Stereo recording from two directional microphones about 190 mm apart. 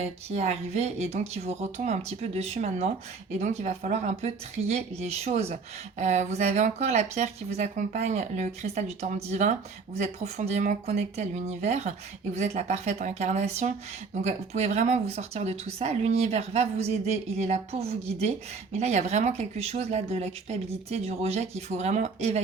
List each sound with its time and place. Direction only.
0.0 s speech: 35° right (ahead or behind)